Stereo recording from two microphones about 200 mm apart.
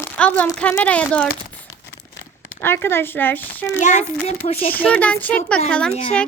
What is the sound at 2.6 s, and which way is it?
Speech, 10° left (ahead or behind).